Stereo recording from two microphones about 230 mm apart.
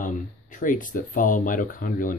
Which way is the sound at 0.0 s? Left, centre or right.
Left.